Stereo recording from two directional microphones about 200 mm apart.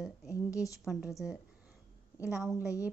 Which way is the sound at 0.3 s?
15° left (ahead or behind).